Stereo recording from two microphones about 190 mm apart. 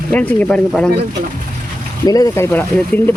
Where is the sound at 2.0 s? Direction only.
20° left (ahead or behind).